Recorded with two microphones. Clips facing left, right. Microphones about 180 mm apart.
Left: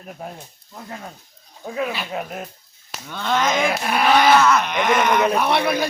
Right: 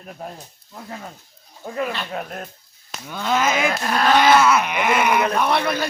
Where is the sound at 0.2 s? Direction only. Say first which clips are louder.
Even; centre (ahead or behind).